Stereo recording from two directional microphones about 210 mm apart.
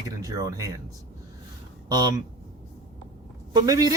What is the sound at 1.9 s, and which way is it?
Speech, 20° right (ahead or behind).